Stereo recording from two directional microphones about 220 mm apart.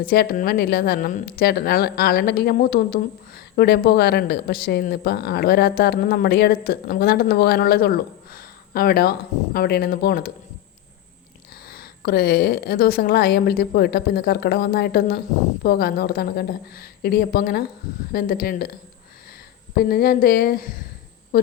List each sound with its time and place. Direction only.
0.0 s speech: 45° left (ahead or behind)
11.7 s a woman's voice: 45° left (ahead or behind)